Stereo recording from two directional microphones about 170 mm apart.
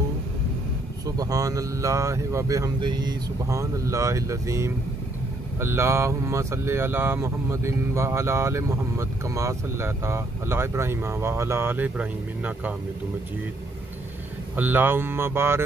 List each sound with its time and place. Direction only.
1.0 s speech: 20° right (ahead or behind)
14.5 s speech: 10° right (ahead or behind)